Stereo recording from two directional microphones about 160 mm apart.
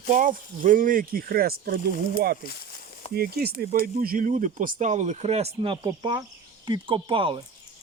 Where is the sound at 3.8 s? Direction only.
65° right (ahead or behind); by 7.4 s 30° right (ahead or behind).